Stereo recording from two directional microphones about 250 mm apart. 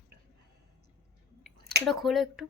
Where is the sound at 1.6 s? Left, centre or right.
Right.